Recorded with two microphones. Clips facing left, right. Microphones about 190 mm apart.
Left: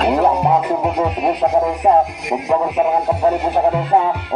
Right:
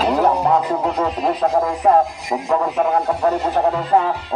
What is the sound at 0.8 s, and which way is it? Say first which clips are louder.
Speech: left 2 dB; 10° left (ahead or behind).